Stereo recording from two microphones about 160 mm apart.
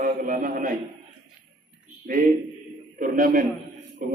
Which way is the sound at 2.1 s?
60° right (ahead or behind).